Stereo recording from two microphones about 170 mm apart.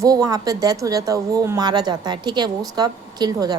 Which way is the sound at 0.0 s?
20° right (ahead or behind).